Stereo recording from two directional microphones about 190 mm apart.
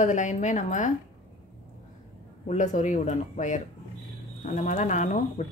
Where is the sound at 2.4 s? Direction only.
40° left (ahead or behind).